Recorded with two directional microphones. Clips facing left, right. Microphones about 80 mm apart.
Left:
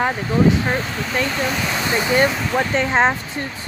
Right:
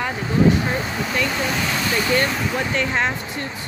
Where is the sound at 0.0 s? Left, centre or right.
Left.